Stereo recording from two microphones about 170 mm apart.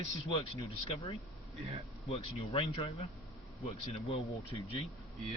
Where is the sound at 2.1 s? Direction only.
30° left (ahead or behind).